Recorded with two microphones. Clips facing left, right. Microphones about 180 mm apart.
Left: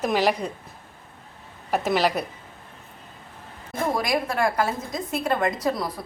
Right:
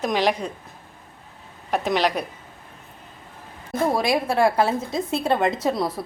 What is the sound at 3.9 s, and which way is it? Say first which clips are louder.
A woman's voice: right 2 dB; 30° right (ahead or behind).